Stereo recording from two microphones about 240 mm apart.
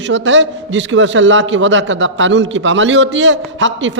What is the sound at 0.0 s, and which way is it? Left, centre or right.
A man's voice, right.